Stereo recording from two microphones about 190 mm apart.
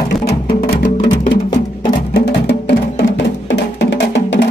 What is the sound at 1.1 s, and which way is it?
Music, 25° left (ahead or behind).